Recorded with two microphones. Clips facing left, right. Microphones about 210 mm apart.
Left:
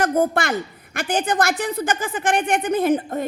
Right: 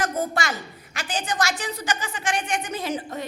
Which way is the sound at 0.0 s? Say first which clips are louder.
Left 7 dB; 55° left (ahead or behind).